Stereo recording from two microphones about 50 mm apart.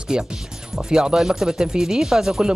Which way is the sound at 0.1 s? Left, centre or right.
Centre.